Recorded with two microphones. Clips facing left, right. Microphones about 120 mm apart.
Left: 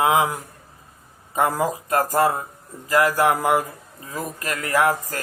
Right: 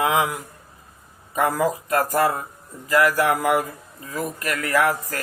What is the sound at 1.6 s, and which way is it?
Speech, 30° left (ahead or behind).